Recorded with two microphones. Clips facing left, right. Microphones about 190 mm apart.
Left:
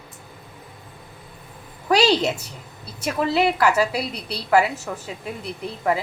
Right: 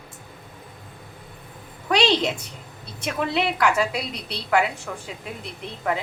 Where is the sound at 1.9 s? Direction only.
5° left (ahead or behind).